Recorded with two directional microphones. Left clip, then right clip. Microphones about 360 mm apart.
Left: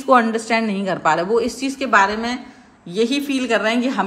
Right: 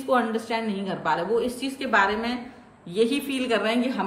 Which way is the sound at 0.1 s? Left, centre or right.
Centre.